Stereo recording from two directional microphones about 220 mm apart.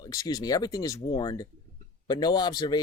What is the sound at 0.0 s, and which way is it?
Speech, 15° left (ahead or behind).